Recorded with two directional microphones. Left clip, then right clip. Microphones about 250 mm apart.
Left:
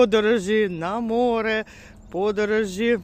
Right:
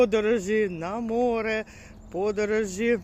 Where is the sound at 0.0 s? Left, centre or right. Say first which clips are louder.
Left 4 dB; left.